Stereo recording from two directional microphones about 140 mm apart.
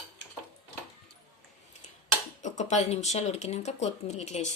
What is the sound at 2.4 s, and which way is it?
Speech, 55° left (ahead or behind).